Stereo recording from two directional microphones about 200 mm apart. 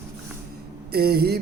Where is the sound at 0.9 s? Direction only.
50° right (ahead or behind).